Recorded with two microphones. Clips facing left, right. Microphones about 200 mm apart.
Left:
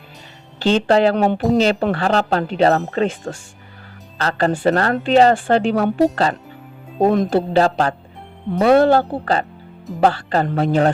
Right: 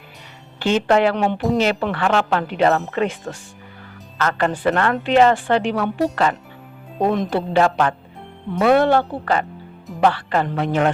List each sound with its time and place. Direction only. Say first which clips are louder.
0.6 s speech: left 2 dB; 30° left (ahead or behind)
7.0 s speech: left 4 dB; 40° left (ahead or behind)